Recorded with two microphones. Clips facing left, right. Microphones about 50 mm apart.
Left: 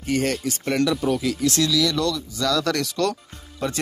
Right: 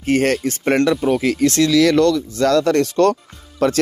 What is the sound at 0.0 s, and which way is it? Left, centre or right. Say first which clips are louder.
Speech: right 6 dB; right.